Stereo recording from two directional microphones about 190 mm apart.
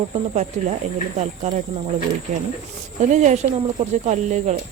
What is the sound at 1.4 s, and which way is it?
Speech, 35° right (ahead or behind).